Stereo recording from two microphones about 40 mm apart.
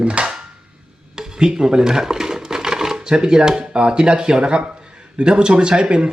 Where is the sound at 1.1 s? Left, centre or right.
Centre.